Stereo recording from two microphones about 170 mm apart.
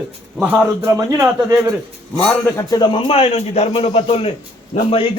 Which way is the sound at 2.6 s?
25° left (ahead or behind).